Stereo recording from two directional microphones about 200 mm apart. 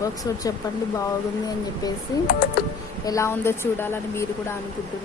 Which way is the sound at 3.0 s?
15° left (ahead or behind).